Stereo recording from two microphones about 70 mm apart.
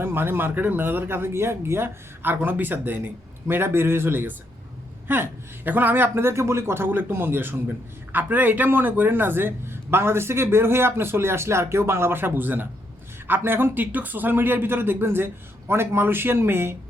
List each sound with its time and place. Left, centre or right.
0.0 s a man's voice: right